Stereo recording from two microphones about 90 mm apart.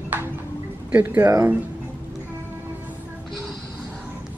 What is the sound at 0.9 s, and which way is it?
Speech, 25° right (ahead or behind).